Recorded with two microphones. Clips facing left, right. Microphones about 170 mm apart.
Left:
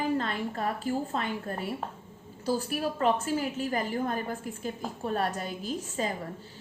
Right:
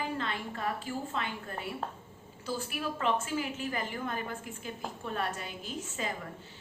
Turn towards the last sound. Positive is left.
turn(degrees=40)  # may be behind; listen again after turning